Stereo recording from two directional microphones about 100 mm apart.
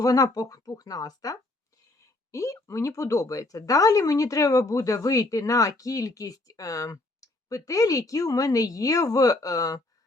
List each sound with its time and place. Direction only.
0.0 s speech: 35° left (ahead or behind)